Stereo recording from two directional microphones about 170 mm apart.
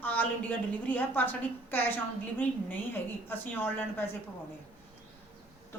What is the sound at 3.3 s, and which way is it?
Speech, 10° left (ahead or behind).